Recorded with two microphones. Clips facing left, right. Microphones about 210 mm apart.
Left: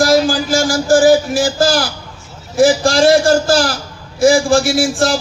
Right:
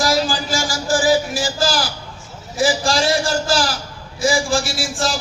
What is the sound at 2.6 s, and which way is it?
A man's voice, 50° left (ahead or behind).